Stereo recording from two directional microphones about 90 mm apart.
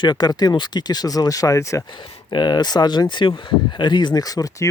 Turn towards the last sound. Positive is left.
turn(degrees=40)  # may be behind; listen again after turning